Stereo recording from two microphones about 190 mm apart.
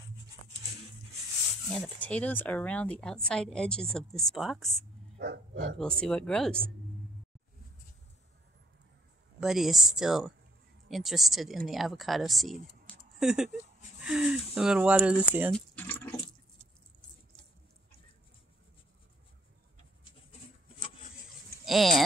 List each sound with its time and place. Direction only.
1.7 s speech: 5° left (ahead or behind)
5.2 s speech: 65° right (ahead or behind)
5.8 s speech: 5° left (ahead or behind)
9.4 s speech: centre (ahead or behind)
15.5 s typing: 10° left (ahead or behind)
21.6 s speech: centre (ahead or behind)